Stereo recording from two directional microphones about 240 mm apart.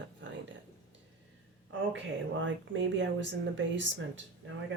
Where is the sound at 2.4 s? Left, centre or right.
Right.